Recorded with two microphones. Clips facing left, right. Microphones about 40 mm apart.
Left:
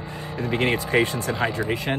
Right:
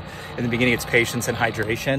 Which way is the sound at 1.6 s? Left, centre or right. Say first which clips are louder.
Right 1 dB; centre.